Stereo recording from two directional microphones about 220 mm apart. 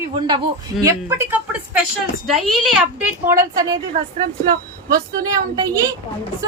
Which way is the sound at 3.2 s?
15° right (ahead or behind).